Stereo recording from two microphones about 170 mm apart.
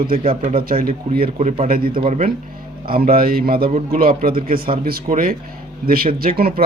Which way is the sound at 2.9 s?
60° right (ahead or behind).